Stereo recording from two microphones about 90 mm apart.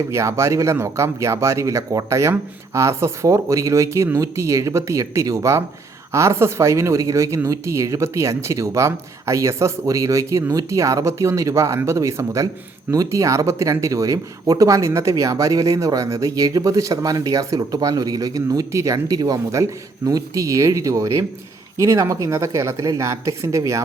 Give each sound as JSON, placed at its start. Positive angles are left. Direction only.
{"t": 0.1, "sound": "speech", "side_deg": -30}